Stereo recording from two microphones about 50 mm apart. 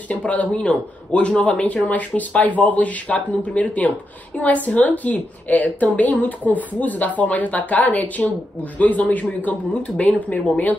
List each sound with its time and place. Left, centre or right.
0.1 s speech: left
0.5 s a woman's voice: centre